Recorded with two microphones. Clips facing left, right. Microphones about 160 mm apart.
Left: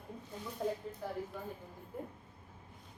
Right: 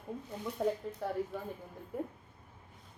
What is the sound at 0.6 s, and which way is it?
Speech, 70° right (ahead or behind).